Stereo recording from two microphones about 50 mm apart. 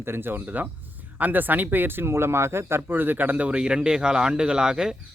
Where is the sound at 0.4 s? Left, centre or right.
Right.